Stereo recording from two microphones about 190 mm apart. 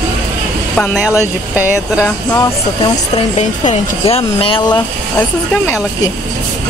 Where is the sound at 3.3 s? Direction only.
30° left (ahead or behind).